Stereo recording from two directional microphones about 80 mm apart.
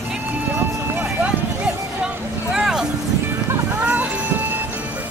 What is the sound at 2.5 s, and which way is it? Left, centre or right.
Music, centre.